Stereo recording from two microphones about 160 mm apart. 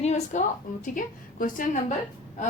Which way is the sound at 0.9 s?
55° left (ahead or behind).